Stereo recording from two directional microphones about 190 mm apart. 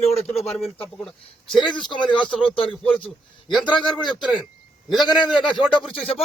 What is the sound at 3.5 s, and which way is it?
Speech, centre (ahead or behind).